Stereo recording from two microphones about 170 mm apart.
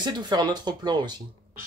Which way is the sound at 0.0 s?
25° right (ahead or behind).